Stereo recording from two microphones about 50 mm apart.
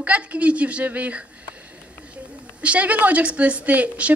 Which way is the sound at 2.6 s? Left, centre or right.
Right.